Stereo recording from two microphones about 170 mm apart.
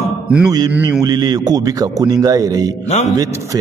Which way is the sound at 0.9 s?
20° right (ahead or behind).